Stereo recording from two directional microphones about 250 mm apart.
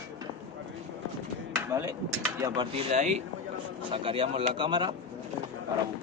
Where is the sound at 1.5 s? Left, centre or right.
Centre.